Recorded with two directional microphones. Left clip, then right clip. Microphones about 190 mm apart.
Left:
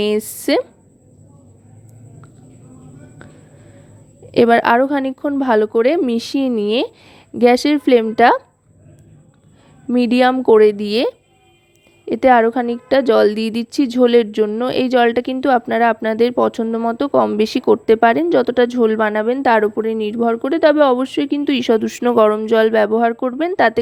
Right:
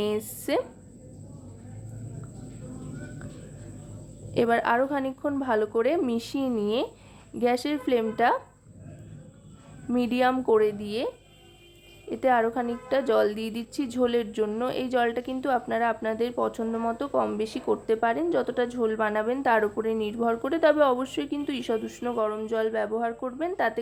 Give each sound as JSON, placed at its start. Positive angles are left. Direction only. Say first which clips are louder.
{"t": 0.0, "sound": "a woman's voice", "louder": "left 11 dB", "side_deg": 45}
{"t": 4.3, "sound": "a woman's voice", "louder": "left 11 dB", "side_deg": 45}
{"t": 9.9, "sound": "a woman's voice", "louder": "left 10 dB", "side_deg": 40}